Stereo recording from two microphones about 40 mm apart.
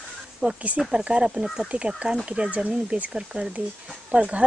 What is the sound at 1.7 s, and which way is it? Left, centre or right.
Speech, right.